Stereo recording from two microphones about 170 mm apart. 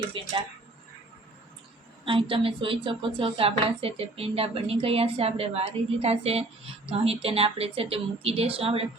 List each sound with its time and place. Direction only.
0.1 s a woman's voice: 30° right (ahead or behind)
2.0 s a woman's voice: 30° right (ahead or behind)